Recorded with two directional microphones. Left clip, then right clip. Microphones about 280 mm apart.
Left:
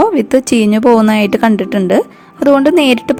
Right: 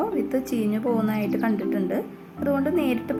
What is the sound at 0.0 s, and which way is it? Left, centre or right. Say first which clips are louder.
A woman's voice: left 15 dB; left.